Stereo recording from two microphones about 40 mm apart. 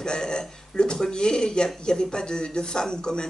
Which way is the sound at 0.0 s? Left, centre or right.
Centre.